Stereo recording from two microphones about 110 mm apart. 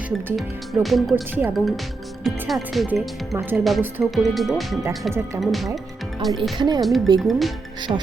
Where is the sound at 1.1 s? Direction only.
15° right (ahead or behind).